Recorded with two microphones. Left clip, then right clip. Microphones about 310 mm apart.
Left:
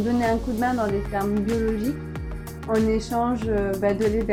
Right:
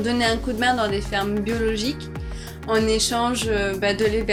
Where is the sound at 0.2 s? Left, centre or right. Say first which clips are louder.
Right 2 dB; right.